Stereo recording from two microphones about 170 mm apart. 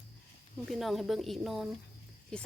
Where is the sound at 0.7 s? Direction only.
Centre (ahead or behind).